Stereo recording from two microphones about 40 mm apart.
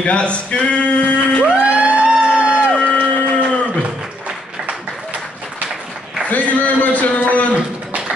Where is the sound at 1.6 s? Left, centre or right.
Right.